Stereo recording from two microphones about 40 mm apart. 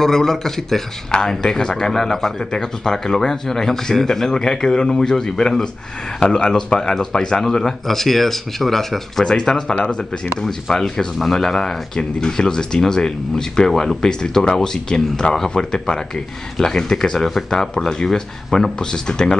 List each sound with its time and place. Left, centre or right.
0.0 s speech: centre
9.2 s speech: centre